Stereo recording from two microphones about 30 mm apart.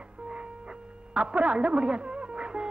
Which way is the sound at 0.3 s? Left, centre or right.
Right.